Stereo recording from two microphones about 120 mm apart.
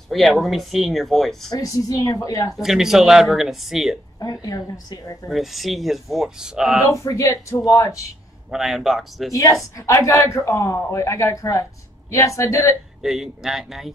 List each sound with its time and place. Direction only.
0.1 s speech: centre (ahead or behind)
1.5 s a woman's voice: 30° left (ahead or behind)
2.5 s speech: centre (ahead or behind)
4.2 s a woman's voice: 30° left (ahead or behind)
5.3 s speech: centre (ahead or behind)
6.9 s a woman's voice: 25° left (ahead or behind)
8.5 s speech: 5° right (ahead or behind)
9.3 s a woman's voice: 30° left (ahead or behind)
13.0 s speech: 5° right (ahead or behind)